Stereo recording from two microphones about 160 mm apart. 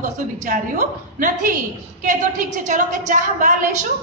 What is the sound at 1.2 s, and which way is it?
A woman's voice, 60° right (ahead or behind).